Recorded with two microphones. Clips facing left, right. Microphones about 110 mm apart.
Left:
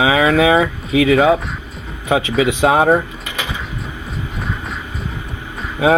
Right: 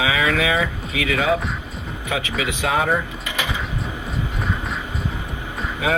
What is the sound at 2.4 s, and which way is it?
Speech, 30° left (ahead or behind).